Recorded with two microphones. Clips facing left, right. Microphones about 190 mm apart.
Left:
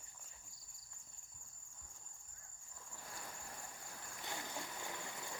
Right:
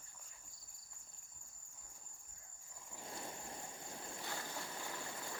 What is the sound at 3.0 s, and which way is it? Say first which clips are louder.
Boat: right 5 dB; 25° right (ahead or behind).